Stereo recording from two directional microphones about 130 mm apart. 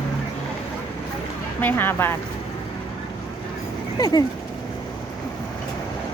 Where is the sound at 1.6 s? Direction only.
15° left (ahead or behind).